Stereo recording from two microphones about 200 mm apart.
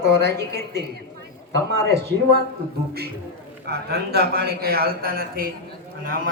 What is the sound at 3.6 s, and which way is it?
A man's voice, 55° right (ahead or behind).